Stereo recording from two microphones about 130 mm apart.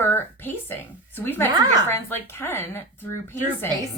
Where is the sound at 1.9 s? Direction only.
15° left (ahead or behind).